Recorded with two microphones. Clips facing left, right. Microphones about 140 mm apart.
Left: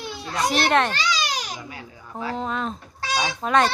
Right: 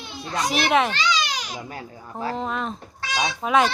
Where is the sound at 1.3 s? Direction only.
40° left (ahead or behind).